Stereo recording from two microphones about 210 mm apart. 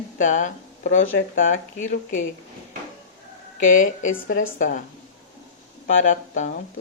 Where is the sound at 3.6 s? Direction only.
40° left (ahead or behind).